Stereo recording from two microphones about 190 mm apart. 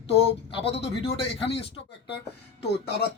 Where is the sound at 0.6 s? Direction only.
30° left (ahead or behind).